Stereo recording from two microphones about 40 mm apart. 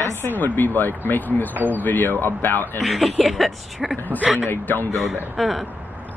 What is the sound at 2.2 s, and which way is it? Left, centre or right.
Speech, left.